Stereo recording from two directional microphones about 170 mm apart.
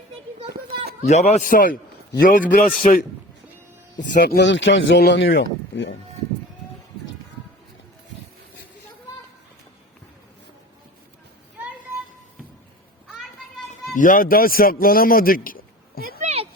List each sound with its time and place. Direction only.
1.0 s a man's voice: 40° left (ahead or behind); by 3.1 s 55° left (ahead or behind)
4.1 s speech: 60° left (ahead or behind); by 5.9 s 90° left
13.9 s a man's voice: 50° left (ahead or behind)
16.2 s a sound: 40° right (ahead or behind)